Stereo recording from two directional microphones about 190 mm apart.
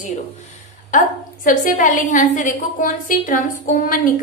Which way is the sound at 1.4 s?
45° left (ahead or behind).